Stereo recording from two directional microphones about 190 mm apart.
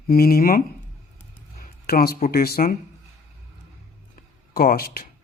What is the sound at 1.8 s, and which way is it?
Speech, 55° left (ahead or behind).